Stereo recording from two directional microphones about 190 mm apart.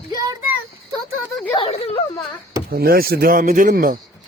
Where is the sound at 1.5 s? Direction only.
30° left (ahead or behind).